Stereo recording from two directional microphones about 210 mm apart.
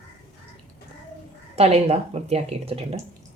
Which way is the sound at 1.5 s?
30° right (ahead or behind).